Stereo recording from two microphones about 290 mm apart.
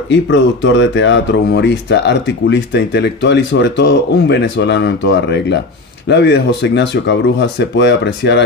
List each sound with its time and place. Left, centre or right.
0.1 s speech: left